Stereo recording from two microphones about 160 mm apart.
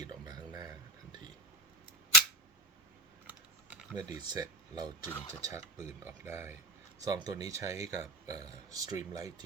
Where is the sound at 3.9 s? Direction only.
25° right (ahead or behind).